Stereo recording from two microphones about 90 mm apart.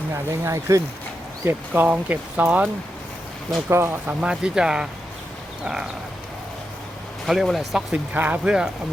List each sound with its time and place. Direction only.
0.1 s speech: 30° right (ahead or behind)
1.5 s speech: 20° right (ahead or behind)
3.7 s speech: 30° right (ahead or behind)
4.0 s speech: 10° right (ahead or behind)
7.3 s speech: centre (ahead or behind)
8.1 s speech: 15° right (ahead or behind)